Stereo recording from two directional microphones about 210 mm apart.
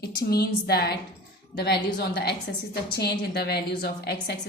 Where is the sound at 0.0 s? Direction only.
50° left (ahead or behind).